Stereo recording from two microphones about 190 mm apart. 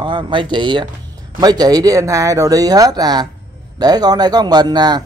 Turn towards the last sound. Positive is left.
turn(degrees=-20)  # may be behind; listen again after turning